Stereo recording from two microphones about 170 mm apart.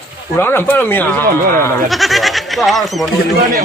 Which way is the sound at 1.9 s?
Centre (ahead or behind).